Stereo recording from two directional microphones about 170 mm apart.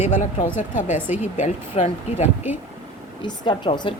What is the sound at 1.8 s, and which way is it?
Speech, 35° left (ahead or behind).